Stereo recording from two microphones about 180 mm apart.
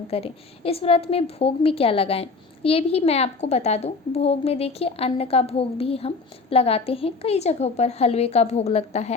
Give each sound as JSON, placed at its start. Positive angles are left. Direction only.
{"t": 0.1, "sound": "a woman's voice", "side_deg": 35}